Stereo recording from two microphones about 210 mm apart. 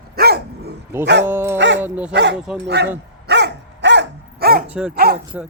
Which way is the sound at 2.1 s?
55° right (ahead or behind).